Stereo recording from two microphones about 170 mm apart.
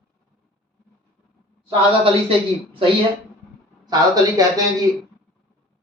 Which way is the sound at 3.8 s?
20° right (ahead or behind).